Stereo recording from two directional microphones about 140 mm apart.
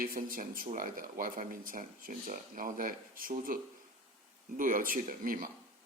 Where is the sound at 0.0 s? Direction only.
90° right.